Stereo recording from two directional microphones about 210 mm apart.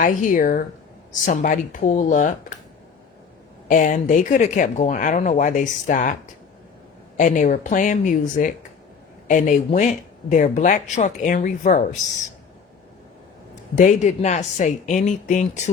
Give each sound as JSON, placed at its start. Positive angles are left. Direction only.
{"t": 0.0, "sound": "speech", "side_deg": 40}
{"t": 3.7, "sound": "speech", "side_deg": 40}
{"t": 7.2, "sound": "speech", "side_deg": 35}
{"t": 13.7, "sound": "speech", "side_deg": 35}